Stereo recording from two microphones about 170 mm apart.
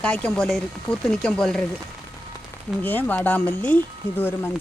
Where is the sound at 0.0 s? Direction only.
5° left (ahead or behind).